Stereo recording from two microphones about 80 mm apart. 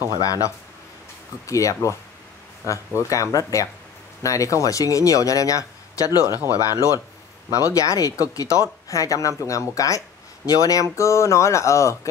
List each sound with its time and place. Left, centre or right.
0.2 s speech: left